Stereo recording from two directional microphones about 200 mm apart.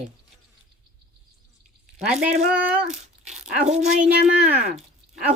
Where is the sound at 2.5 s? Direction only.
5° right (ahead or behind).